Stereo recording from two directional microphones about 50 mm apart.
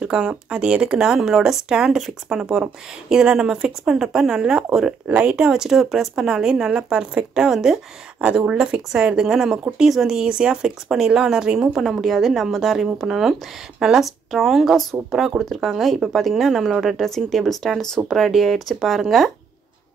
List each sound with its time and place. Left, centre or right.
0.0 s speech: centre
5.0 s speech: right
5.5 s speech: centre
8.2 s speech: right
11.8 s speech: centre